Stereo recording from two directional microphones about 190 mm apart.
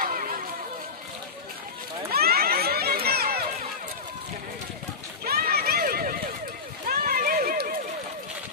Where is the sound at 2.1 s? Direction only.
55° right (ahead or behind).